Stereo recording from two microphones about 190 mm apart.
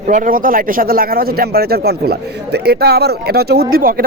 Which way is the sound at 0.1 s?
45° right (ahead or behind).